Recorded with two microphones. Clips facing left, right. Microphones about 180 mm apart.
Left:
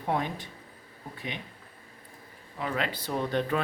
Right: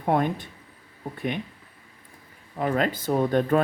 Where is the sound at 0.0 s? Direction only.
50° right (ahead or behind).